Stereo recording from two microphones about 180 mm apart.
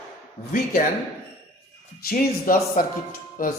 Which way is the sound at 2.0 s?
55° left (ahead or behind).